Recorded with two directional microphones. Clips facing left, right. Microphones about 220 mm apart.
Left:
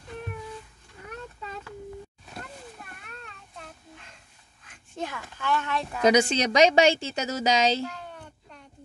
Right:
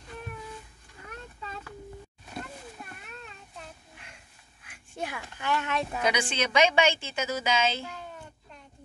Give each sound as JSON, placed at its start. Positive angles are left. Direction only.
{"t": 3.0, "sound": "child singing", "side_deg": 0}
{"t": 4.6, "sound": "a sound", "side_deg": -15}
{"t": 6.0, "sound": "a woman's voice", "side_deg": 40}